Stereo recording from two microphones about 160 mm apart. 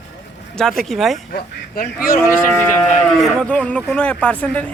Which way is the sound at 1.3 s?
65° left (ahead or behind).